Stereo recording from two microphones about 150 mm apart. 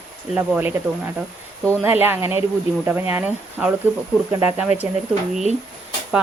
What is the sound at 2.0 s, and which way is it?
Speech, 15° right (ahead or behind).